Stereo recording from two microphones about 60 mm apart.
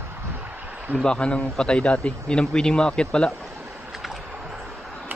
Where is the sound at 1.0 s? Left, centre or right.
Centre.